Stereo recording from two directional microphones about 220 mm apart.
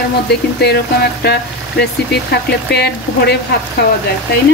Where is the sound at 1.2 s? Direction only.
50° left (ahead or behind).